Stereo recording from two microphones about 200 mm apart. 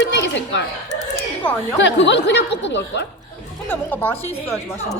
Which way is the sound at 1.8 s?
60° left (ahead or behind).